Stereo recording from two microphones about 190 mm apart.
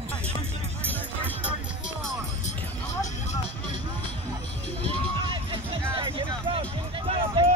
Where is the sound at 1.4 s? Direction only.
5° right (ahead or behind).